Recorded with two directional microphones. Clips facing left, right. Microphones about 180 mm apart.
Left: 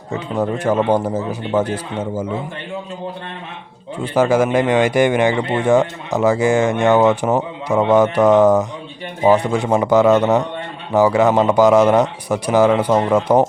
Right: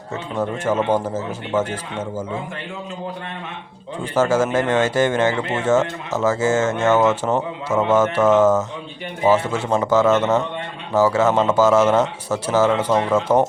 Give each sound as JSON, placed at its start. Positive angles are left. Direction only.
{"t": 0.1, "sound": "speech", "side_deg": 10}
{"t": 4.1, "sound": "speech", "side_deg": 10}